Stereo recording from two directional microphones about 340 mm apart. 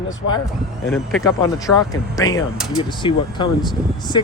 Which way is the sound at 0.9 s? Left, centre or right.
Centre.